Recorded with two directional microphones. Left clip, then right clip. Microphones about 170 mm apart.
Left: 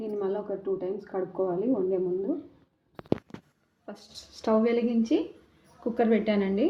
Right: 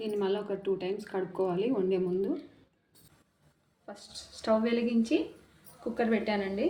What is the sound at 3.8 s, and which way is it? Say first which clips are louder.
A woman's voice: left 1 dB; 45° left (ahead or behind).